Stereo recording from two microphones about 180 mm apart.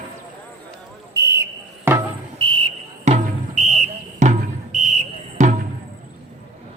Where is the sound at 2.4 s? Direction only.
30° right (ahead or behind).